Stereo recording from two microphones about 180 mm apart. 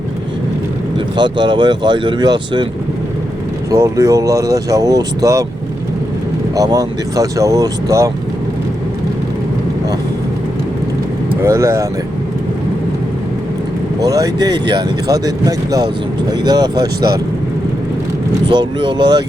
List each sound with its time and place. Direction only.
0.9 s speech: 25° right (ahead or behind)
3.7 s speech: 15° right (ahead or behind)
6.6 s speech: 20° right (ahead or behind)
11.4 s speech: 15° right (ahead or behind)
14.0 s speech: 20° right (ahead or behind)
18.4 s speech: 25° right (ahead or behind)